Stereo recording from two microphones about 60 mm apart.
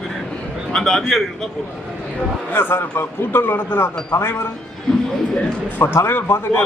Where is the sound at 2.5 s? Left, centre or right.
Left.